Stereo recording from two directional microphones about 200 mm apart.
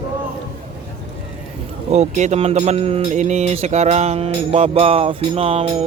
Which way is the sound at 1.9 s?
35° right (ahead or behind).